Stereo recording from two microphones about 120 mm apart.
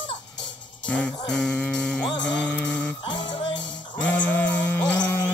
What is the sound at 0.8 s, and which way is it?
Music, 10° left (ahead or behind).